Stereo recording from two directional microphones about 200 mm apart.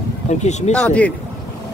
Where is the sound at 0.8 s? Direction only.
5° left (ahead or behind).